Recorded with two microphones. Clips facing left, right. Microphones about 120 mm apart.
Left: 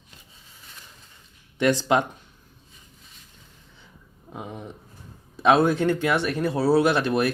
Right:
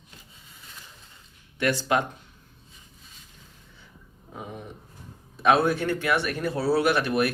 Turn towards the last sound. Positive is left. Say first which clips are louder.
# left 2 dB
turn(degrees=25)  # may be behind; listen again after turning